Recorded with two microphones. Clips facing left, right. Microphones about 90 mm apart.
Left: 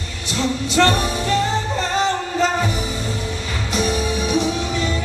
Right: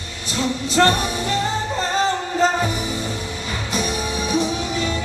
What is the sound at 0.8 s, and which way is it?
Music, 40° right (ahead or behind).